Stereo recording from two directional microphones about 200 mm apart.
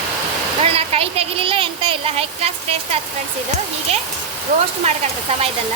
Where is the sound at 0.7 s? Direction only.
30° right (ahead or behind).